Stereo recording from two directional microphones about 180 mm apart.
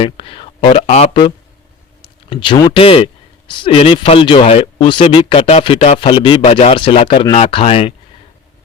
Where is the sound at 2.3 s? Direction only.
25° left (ahead or behind).